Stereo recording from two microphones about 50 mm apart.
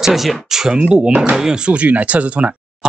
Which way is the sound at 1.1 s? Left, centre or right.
Right.